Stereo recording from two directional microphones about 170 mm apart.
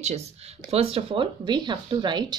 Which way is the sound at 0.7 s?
35° right (ahead or behind).